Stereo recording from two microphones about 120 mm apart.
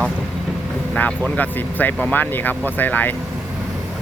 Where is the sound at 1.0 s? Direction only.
10° left (ahead or behind).